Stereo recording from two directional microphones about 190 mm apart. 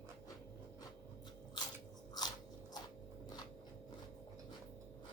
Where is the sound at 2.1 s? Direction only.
20° left (ahead or behind).